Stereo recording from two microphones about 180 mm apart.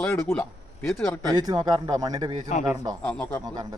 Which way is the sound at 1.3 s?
20° right (ahead or behind).